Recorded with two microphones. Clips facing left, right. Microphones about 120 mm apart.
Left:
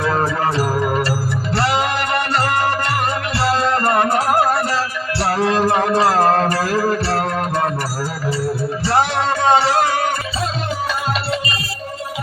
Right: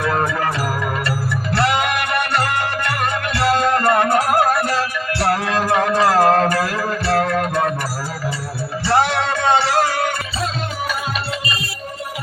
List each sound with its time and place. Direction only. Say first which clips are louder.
0.0 s music: left 1 dB; 30° left (ahead or behind)
5.4 s music: left 2 dB; 35° left (ahead or behind)
8.8 s music: right 1 dB; 35° left (ahead or behind)